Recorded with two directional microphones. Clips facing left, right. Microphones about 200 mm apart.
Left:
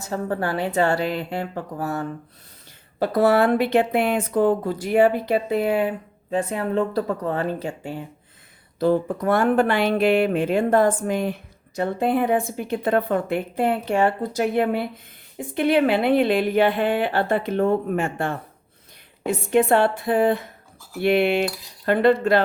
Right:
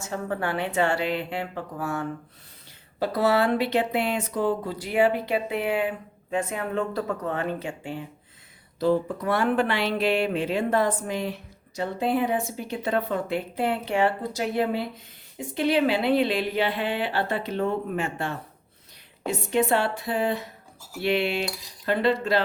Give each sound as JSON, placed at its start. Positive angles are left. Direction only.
{"t": 0.0, "sound": "speech", "side_deg": 35}
{"t": 3.0, "sound": "a woman's voice", "side_deg": 50}
{"t": 8.8, "sound": "a woman's voice", "side_deg": 50}